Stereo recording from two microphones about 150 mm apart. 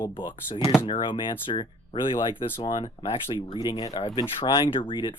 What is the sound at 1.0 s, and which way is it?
Speech, 35° left (ahead or behind).